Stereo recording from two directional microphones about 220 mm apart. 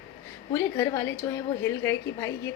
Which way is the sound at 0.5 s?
15° left (ahead or behind).